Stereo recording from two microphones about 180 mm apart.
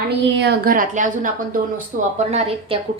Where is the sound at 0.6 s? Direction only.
50° right (ahead or behind).